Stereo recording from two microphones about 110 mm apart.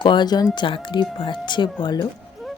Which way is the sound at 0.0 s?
45° left (ahead or behind).